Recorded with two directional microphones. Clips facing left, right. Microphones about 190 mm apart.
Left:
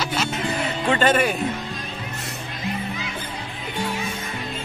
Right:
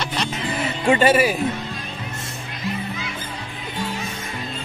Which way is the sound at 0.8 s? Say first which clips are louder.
Right 3 dB; 10° right (ahead or behind).